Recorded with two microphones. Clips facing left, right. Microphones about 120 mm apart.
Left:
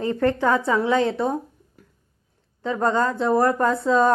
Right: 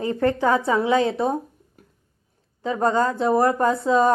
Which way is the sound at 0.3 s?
25° right (ahead or behind).